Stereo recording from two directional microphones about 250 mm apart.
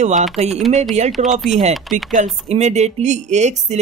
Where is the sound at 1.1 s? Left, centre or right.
Centre.